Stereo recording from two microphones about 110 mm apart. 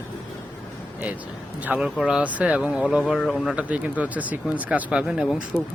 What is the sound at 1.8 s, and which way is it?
Speech, 5° right (ahead or behind).